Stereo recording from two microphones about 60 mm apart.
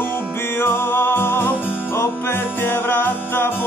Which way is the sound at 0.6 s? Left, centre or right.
Left.